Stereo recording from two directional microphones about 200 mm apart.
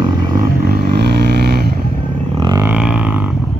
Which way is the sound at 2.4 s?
15° right (ahead or behind).